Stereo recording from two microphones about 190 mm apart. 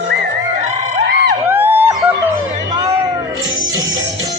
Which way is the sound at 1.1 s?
55° right (ahead or behind).